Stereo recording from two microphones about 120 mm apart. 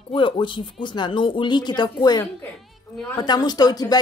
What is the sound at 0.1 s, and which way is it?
A woman's voice, 45° left (ahead or behind).